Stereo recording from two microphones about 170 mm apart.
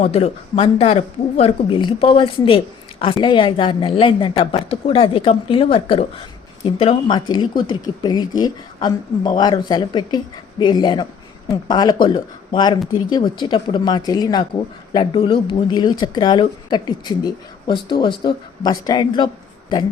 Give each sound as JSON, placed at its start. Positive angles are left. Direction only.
{"t": 0.0, "sound": "a woman's voice", "side_deg": 35}